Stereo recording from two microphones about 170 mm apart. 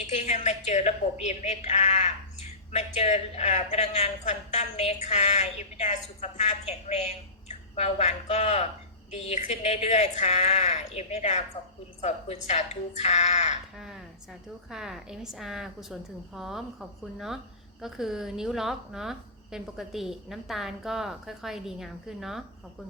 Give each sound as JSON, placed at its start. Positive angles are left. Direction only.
{"t": 0.1, "sound": "speech", "side_deg": 40}
{"t": 13.7, "sound": "a woman's voice", "side_deg": 0}